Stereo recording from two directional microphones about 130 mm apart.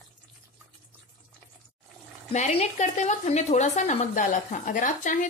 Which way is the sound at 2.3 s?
60° left (ahead or behind).